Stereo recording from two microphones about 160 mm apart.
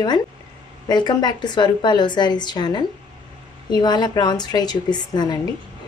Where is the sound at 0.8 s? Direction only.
25° left (ahead or behind).